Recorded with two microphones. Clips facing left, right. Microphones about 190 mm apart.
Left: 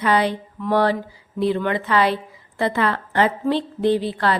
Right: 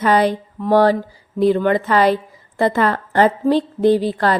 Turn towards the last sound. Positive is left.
turn(degrees=-45)  # may be behind; listen again after turning